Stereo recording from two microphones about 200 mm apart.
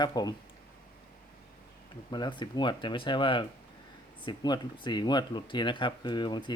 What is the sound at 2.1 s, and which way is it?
Speech, 20° left (ahead or behind).